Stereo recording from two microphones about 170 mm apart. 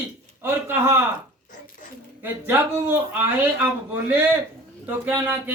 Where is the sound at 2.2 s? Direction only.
10° right (ahead or behind).